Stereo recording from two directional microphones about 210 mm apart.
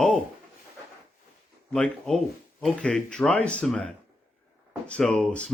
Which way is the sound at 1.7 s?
5° left (ahead or behind).